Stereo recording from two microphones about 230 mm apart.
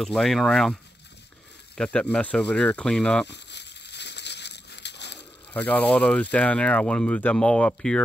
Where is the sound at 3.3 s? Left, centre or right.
Left.